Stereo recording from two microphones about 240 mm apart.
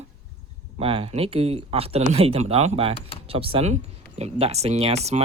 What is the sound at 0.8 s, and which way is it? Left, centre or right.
Speech, right.